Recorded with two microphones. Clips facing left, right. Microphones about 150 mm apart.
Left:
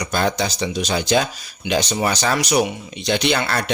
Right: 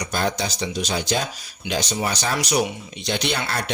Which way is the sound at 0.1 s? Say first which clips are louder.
Left 4 dB; 90° left.